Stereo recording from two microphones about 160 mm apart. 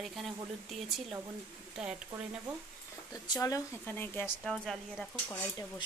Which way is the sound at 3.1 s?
20° left (ahead or behind).